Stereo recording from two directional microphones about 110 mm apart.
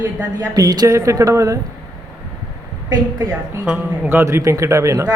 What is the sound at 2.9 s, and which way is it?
Speech, 35° right (ahead or behind).